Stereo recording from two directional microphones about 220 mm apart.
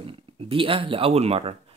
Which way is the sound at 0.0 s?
25° right (ahead or behind).